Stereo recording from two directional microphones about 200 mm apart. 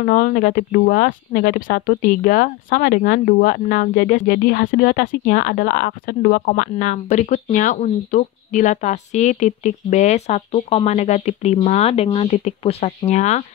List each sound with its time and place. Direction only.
0.0 s speech: 50° left (ahead or behind)